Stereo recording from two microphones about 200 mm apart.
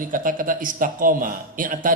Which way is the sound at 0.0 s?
40° right (ahead or behind).